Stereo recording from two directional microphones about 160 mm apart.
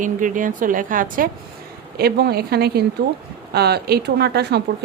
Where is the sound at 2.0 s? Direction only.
85° right.